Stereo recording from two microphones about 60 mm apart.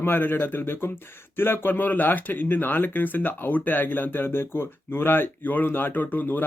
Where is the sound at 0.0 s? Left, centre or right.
Left.